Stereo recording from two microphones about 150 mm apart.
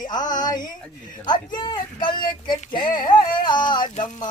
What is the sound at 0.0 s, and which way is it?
Speech, 25° left (ahead or behind).